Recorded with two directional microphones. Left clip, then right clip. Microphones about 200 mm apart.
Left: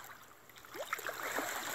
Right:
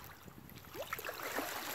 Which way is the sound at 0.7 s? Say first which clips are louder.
Left 2 dB; 20° right (ahead or behind).